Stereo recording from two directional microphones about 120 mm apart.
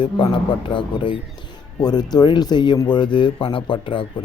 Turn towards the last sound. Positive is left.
turn(degrees=45)  # may be behind; listen again after turning